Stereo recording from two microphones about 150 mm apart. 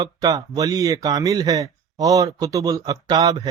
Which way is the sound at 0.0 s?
25° right (ahead or behind).